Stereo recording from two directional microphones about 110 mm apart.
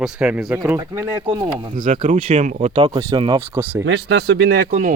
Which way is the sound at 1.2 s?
45° right (ahead or behind).